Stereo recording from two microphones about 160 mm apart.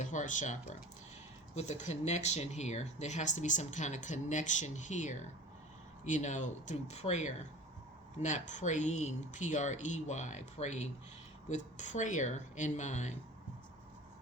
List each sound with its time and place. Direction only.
0.0 s speech: 50° left (ahead or behind)